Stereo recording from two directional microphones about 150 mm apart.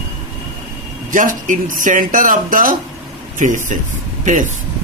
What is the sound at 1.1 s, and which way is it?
A man's voice, 60° right (ahead or behind).